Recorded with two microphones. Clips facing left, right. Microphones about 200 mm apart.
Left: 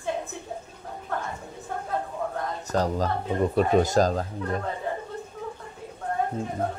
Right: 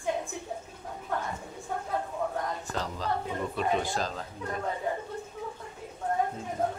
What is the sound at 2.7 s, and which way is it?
Speech, 45° left (ahead or behind).